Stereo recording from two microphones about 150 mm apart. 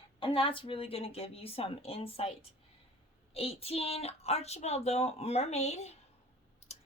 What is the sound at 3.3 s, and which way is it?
Speech, 40° left (ahead or behind).